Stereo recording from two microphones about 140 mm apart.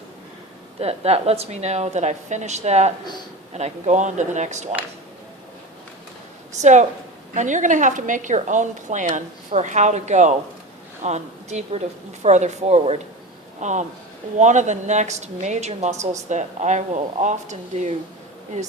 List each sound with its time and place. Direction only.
0.8 s a woman's voice: 45° right (ahead or behind)
6.6 s a woman's voice: 55° right (ahead or behind)